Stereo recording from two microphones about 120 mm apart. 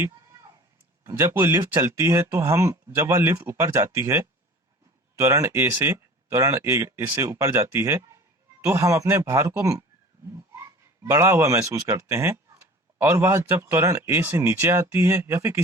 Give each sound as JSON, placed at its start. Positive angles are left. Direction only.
{"t": 1.0, "sound": "speech", "side_deg": -20}
{"t": 10.5, "sound": "a sound", "side_deg": -25}
{"t": 11.0, "sound": "speech", "side_deg": -25}